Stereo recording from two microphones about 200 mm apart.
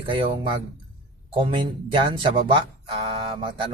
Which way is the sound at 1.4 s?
25° right (ahead or behind).